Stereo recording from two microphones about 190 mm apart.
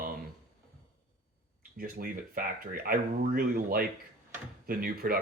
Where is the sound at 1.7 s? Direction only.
50° right (ahead or behind).